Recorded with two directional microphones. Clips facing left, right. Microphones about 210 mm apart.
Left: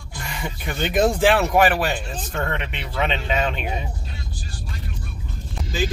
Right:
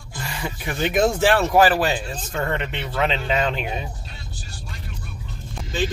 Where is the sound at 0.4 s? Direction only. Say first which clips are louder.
Right 2 dB; centre (ahead or behind).